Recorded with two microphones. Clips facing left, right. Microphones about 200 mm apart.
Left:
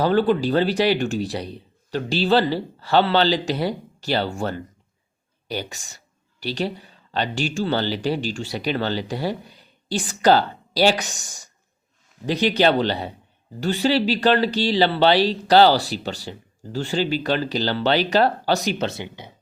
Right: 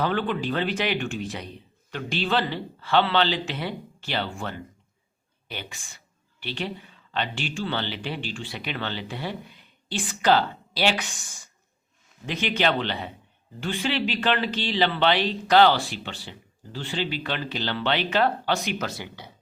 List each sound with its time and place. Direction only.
0.0 s speech: 35° left (ahead or behind); by 19.3 s 20° left (ahead or behind)